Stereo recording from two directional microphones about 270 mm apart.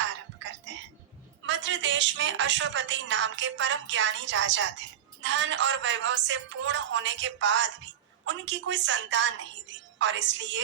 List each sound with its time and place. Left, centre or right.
0.0 s music: right
1.4 s a woman's voice: right